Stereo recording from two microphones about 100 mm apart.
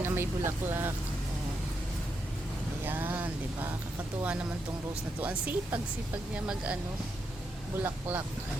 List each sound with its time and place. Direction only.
0.0 s speech: 25° right (ahead or behind)
2.8 s a sound: 20° right (ahead or behind)
5.2 s speech: 15° right (ahead or behind)
7.8 s speech: 20° right (ahead or behind)